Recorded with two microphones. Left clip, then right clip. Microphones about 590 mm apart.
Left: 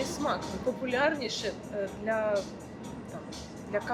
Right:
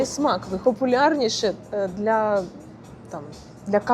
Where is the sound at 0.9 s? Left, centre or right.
Right.